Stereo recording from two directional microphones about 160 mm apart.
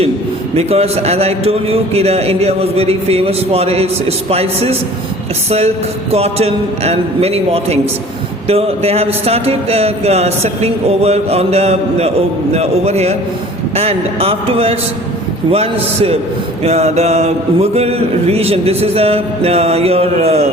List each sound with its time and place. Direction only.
0.5 s mantra: 40° right (ahead or behind)